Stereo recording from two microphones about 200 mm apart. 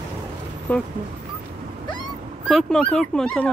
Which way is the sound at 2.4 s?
Centre (ahead or behind).